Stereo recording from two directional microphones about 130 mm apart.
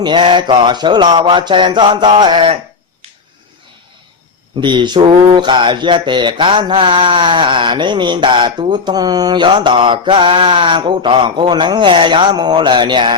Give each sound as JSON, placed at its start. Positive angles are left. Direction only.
{"t": 0.0, "sound": "mantra", "side_deg": -35}
{"t": 4.6, "sound": "mantra", "side_deg": -35}